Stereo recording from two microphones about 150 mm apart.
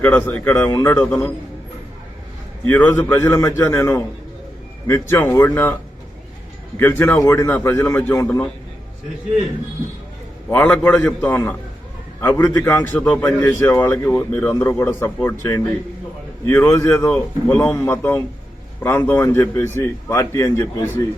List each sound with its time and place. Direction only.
0.0 s a man's voice: 10° left (ahead or behind)
1.0 s a man's voice: 5° left (ahead or behind)
2.6 s a man's voice: 15° left (ahead or behind)
6.7 s a man's voice: 15° left (ahead or behind)
10.5 s a man's voice: 10° left (ahead or behind)